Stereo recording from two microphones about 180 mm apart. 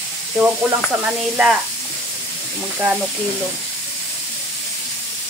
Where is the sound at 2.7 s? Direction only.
5° right (ahead or behind).